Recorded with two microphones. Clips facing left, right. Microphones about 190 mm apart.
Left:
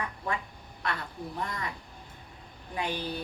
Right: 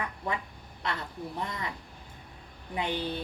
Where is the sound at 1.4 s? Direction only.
20° right (ahead or behind).